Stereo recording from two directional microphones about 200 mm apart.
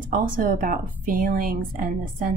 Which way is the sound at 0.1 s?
45° right (ahead or behind).